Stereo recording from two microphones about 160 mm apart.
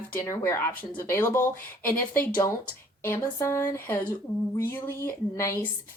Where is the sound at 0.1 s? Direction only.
15° left (ahead or behind).